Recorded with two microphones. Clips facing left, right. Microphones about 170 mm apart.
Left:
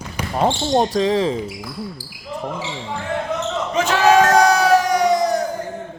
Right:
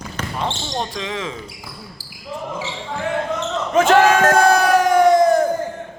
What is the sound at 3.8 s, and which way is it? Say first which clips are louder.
Crowd: right 1 dB; 50° right (ahead or behind).